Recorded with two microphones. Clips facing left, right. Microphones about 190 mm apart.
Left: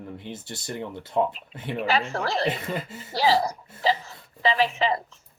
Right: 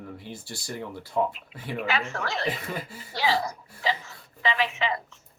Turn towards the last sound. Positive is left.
turn(degrees=35)  # may be behind; listen again after turning